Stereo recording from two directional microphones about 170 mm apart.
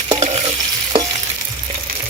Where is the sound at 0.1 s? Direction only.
35° right (ahead or behind).